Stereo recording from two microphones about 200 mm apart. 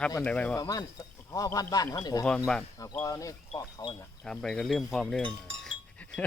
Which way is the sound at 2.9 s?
15° left (ahead or behind).